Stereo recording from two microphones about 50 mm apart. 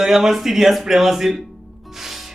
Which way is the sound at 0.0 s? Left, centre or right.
Centre.